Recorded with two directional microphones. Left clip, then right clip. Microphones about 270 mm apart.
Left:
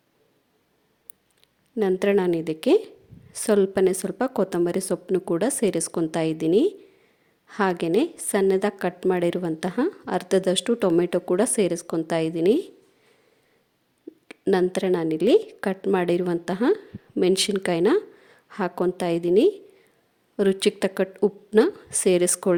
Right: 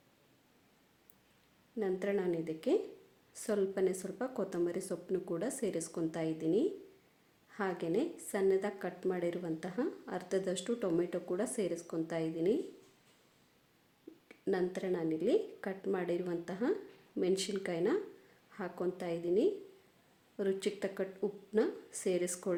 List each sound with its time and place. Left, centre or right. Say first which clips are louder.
1.8 s a woman's voice: left 14 dB; left
14.3 s a woman's voice: left 13 dB; left